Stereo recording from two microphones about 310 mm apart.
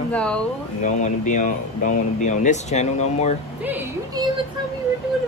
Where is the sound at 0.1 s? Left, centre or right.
Centre.